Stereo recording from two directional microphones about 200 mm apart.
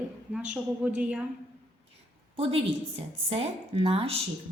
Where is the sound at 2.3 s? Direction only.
30° right (ahead or behind).